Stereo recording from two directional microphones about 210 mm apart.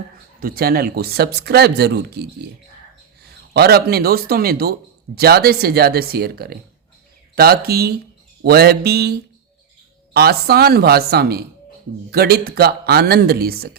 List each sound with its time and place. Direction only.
0.3 s speech: 45° right (ahead or behind)
3.5 s speech: 50° right (ahead or behind)